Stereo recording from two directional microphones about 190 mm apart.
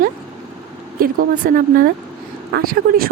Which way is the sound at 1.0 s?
50° right (ahead or behind).